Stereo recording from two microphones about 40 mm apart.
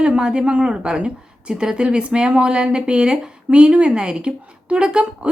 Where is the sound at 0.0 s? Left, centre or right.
Right.